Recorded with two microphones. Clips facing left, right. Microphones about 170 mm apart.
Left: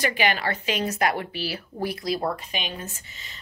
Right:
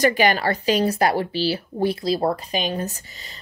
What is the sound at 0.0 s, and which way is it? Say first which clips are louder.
A woman's voice: right 6 dB; 40° right (ahead or behind).